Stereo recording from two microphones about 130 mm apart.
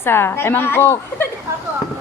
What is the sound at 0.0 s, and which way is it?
A woman's voice, 20° left (ahead or behind).